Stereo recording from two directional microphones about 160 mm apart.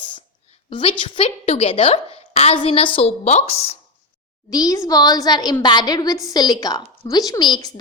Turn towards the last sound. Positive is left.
turn(degrees=25)  # may be behind; listen again after turning